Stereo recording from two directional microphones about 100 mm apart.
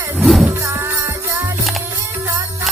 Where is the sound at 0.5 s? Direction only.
25° right (ahead or behind).